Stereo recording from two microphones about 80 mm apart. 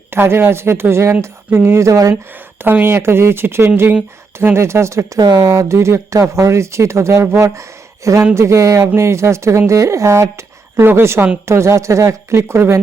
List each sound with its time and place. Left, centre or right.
0.1 s speech: right
2.6 s speech: right
5.2 s speech: right
5.5 s speech: right